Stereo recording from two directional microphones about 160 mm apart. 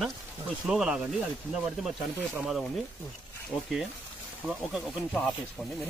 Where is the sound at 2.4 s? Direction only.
Centre (ahead or behind).